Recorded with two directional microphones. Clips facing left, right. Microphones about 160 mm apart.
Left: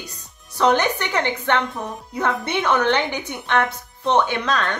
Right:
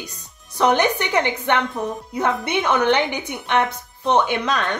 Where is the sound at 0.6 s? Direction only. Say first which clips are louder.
Right 1 dB; 15° right (ahead or behind).